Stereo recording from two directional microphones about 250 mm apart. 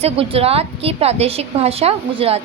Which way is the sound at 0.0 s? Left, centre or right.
Right.